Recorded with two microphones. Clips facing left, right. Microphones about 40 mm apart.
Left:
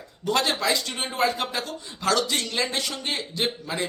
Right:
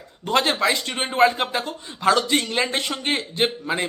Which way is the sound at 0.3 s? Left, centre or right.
Right.